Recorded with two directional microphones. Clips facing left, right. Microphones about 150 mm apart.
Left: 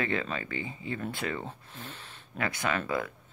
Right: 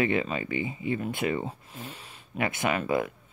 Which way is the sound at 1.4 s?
10° right (ahead or behind).